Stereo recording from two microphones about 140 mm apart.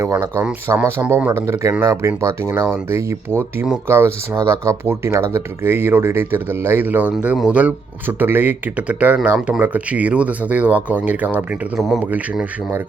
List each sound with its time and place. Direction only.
0.0 s speech: 20° right (ahead or behind)
11.8 s speech: centre (ahead or behind)
12.0 s speech: 10° right (ahead or behind)